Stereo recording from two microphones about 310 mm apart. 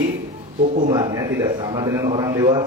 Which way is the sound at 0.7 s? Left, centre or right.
Centre.